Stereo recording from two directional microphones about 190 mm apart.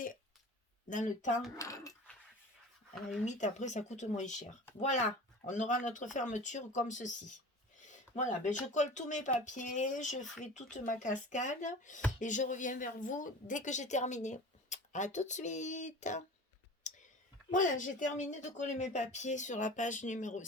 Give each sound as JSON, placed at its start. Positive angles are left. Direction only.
{"t": 0.9, "sound": "a woman's voice", "side_deg": 40}
{"t": 1.5, "sound": "speech", "side_deg": 15}
{"t": 3.2, "sound": "a woman's voice", "side_deg": 40}
{"t": 16.9, "sound": "clicking", "side_deg": 40}
{"t": 17.5, "sound": "a woman's voice", "side_deg": 45}